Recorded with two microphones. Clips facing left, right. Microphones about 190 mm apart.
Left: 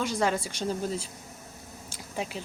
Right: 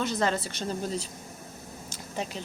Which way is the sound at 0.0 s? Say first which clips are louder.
Even; 10° left (ahead or behind).